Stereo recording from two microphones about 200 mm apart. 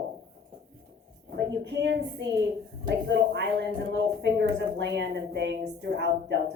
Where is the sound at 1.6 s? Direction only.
60° right (ahead or behind).